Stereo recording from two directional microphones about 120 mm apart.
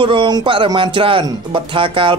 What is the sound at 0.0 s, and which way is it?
Speech, 45° right (ahead or behind).